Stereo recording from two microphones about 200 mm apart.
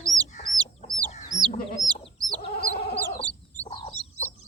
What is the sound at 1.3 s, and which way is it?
Chicken, 45° right (ahead or behind).